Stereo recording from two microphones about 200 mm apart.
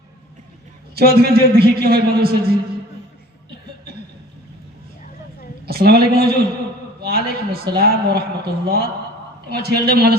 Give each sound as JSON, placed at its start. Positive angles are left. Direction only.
{"t": 0.9, "sound": "a man's voice", "side_deg": -50}
{"t": 5.6, "sound": "a woman's voice", "side_deg": -50}